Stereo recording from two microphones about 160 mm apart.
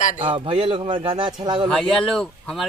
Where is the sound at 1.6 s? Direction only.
5° left (ahead or behind).